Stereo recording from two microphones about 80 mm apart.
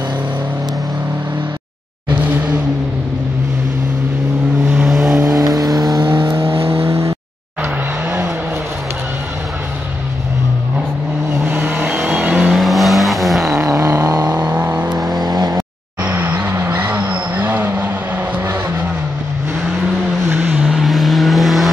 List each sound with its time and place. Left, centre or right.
4.8 s vehicle: centre
5.2 s vehicle: right
6.2 s vehicle: right
11.4 s vehicle: right
12.2 s vehicle: centre
13.7 s a sound: right
14.5 s vehicle: right
15.1 s vehicle: right
16.0 s vehicle: right
20.3 s vehicle: centre
20.6 s vehicle: centre